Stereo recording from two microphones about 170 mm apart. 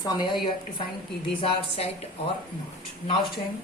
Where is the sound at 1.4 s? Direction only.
30° left (ahead or behind).